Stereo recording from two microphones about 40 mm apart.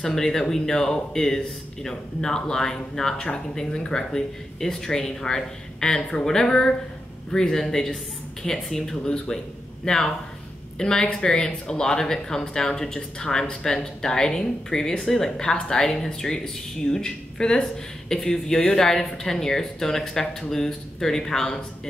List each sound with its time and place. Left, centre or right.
0.0 s speech: centre
9.0 s speech: left